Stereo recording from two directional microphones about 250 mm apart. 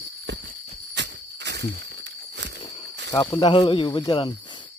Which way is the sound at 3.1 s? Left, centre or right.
Centre.